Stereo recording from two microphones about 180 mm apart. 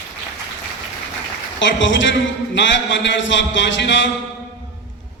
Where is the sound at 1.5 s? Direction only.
90° left.